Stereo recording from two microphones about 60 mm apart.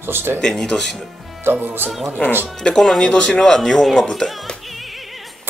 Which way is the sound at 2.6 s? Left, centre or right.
Centre.